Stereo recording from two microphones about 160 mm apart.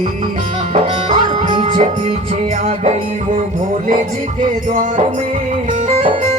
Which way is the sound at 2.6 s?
45° right (ahead or behind).